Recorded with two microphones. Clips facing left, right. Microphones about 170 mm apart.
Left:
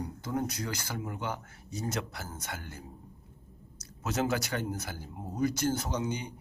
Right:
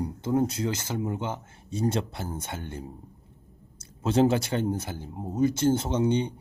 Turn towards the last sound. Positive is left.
turn(degrees=-30)  # may be behind; listen again after turning